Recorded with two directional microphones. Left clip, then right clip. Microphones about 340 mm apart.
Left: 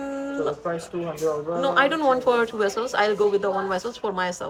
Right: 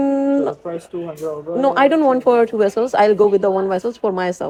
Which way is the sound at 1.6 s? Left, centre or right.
Centre.